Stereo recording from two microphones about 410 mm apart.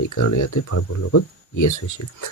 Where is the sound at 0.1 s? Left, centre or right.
Left.